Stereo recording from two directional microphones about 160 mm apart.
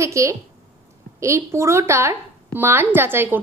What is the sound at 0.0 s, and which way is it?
A woman's voice, 20° right (ahead or behind).